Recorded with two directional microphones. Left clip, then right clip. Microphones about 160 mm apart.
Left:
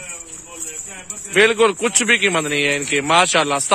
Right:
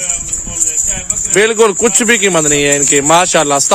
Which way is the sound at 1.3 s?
30° right (ahead or behind).